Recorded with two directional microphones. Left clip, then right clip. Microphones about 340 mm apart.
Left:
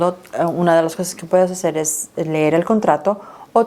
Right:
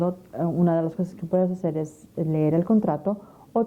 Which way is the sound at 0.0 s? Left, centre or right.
Centre.